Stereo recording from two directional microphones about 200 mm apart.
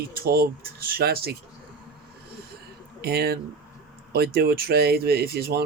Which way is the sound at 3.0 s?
50° right (ahead or behind).